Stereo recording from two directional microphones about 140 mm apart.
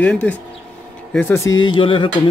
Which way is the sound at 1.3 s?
25° left (ahead or behind).